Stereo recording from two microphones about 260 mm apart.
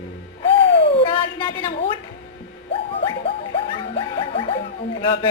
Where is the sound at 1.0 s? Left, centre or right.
Centre.